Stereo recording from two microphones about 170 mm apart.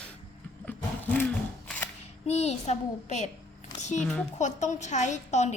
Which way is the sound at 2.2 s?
40° left (ahead or behind).